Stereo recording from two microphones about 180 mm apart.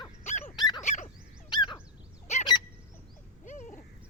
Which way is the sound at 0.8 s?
40° left (ahead or behind).